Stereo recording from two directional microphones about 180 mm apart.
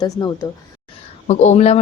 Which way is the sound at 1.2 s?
40° left (ahead or behind).